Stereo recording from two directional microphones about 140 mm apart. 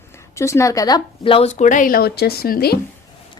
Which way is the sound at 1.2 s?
40° left (ahead or behind).